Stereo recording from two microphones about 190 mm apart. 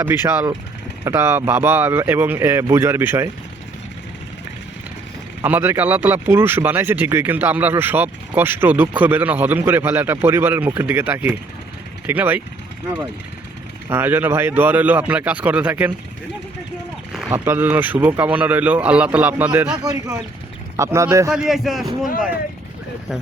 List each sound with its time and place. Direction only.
0.0 s speech: 10° right (ahead or behind)
5.4 s speech: 10° right (ahead or behind)
13.9 s speech: 10° right (ahead or behind)
17.2 s speech: 10° right (ahead or behind)
19.7 s speech: 20° right (ahead or behind)
21.3 s speech: centre (ahead or behind)